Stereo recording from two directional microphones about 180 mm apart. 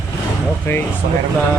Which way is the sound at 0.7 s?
15° left (ahead or behind).